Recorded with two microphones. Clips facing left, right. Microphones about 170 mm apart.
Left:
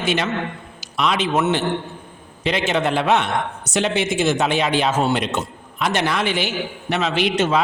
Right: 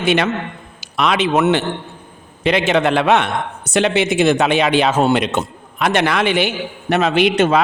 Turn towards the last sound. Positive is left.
turn(degrees=-60)  # may be behind; listen again after turning